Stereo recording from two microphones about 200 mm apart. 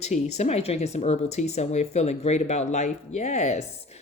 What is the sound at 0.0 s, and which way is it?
Speech, 35° left (ahead or behind).